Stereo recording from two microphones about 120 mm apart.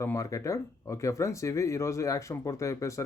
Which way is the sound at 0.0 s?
25° left (ahead or behind).